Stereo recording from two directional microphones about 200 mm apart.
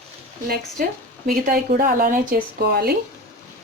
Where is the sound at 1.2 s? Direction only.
45° right (ahead or behind).